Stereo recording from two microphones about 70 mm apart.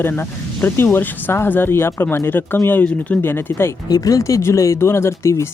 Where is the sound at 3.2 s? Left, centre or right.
Left.